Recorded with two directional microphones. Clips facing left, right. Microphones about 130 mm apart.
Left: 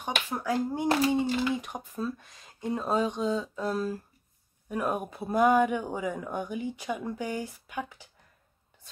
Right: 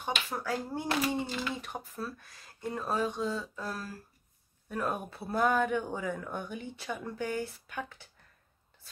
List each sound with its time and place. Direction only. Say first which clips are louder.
0.0 s speech: left 3 dB; 15° left (ahead or behind)